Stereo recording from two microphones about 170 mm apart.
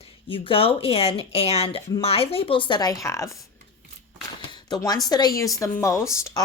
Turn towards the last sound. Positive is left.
turn(degrees=15)  # may be behind; listen again after turning